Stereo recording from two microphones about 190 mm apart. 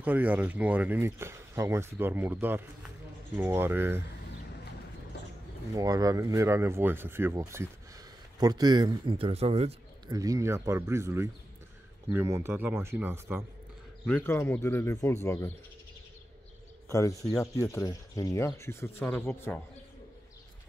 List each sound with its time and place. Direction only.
0.0 s speech: 10° right (ahead or behind)
5.8 s speech: 20° right (ahead or behind)
10.1 s speech: 20° right (ahead or behind)
14.0 s speech: 10° left (ahead or behind)
16.9 s speech: 15° left (ahead or behind)